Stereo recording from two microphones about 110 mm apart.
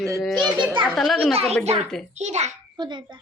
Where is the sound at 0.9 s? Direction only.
5° left (ahead or behind).